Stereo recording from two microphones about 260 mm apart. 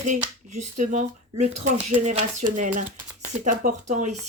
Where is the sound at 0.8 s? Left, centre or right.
Right.